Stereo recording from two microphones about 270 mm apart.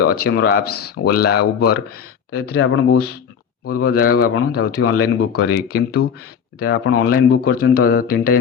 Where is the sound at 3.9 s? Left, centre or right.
Left.